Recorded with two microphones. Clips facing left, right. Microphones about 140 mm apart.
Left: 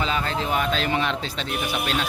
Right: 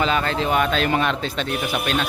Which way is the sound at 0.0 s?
70° right (ahead or behind).